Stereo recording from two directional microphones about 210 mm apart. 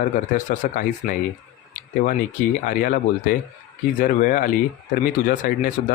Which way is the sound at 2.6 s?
40° left (ahead or behind).